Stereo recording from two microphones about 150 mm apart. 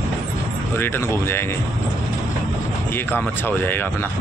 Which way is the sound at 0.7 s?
15° left (ahead or behind).